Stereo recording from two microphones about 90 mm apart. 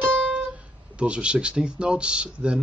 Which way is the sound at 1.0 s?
10° right (ahead or behind).